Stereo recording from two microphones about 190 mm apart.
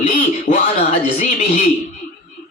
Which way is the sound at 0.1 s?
40° left (ahead or behind).